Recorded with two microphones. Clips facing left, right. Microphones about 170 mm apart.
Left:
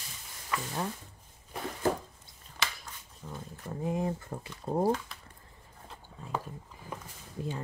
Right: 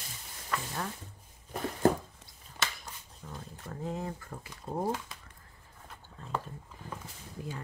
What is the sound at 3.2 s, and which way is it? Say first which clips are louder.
Speech: left 3 dB; 10° left (ahead or behind).